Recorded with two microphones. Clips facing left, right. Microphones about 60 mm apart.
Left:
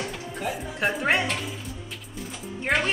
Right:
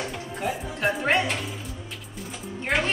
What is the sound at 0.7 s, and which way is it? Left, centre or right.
Speech, centre.